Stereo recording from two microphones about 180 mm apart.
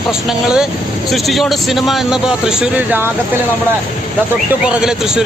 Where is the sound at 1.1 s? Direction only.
Centre (ahead or behind).